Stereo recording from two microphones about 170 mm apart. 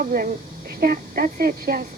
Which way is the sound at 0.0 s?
60° right (ahead or behind).